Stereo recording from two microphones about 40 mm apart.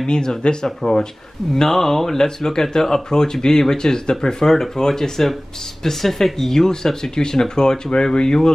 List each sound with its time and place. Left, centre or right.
0.0 s speech: centre